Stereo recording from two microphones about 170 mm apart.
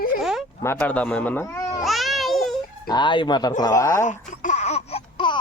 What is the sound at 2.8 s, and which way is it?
Speech, 25° left (ahead or behind).